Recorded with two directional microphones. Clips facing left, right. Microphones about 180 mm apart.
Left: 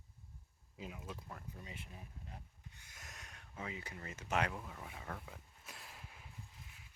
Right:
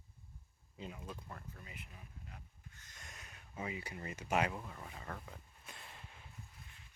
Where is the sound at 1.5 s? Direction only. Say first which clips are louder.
Left 3 dB; 25° left (ahead or behind).